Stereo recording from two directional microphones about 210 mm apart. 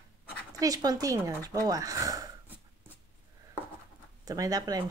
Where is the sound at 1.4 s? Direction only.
15° right (ahead or behind).